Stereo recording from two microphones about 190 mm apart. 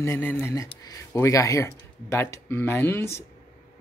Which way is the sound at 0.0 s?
10° left (ahead or behind).